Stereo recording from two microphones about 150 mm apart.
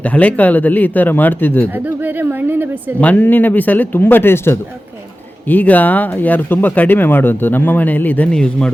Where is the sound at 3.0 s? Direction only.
10° left (ahead or behind).